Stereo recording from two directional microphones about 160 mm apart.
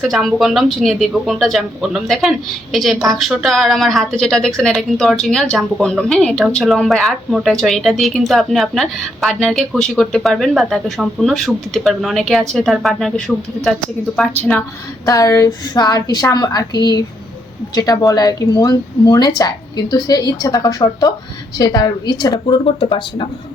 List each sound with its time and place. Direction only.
0.0 s a woman's voice: centre (ahead or behind)
15.0 s speech: 20° left (ahead or behind)